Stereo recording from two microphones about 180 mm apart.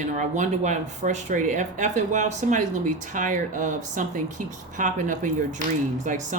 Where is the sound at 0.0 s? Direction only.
40° right (ahead or behind).